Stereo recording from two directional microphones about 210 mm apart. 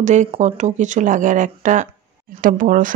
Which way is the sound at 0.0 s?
35° right (ahead or behind).